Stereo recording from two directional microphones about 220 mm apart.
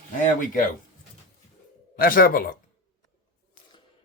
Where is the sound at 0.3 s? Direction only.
35° left (ahead or behind).